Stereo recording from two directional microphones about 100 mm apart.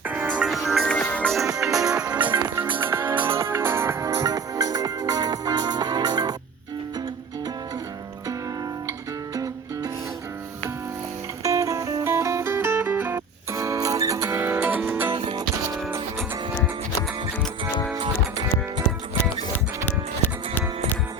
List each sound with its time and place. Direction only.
0.1 s music: 15° right (ahead or behind)
0.9 s music: 15° left (ahead or behind)
1.3 s music: 5° right (ahead or behind); by 6.3 s 45° right (ahead or behind)
8.9 s music: 35° right (ahead or behind)
11.4 s music: 35° right (ahead or behind)
14.3 s music: 20° right (ahead or behind)
15.1 s music: 65° right (ahead or behind)
19.8 s music: 20° left (ahead or behind)